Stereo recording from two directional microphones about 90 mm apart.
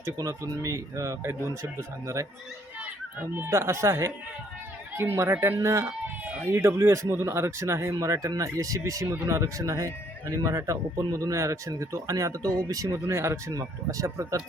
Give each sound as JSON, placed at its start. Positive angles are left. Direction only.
{"t": 0.0, "sound": "a child's voice", "side_deg": -30}
{"t": 7.9, "sound": "speech", "side_deg": -40}